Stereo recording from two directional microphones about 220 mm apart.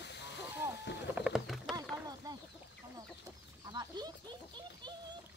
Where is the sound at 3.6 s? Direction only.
20° right (ahead or behind).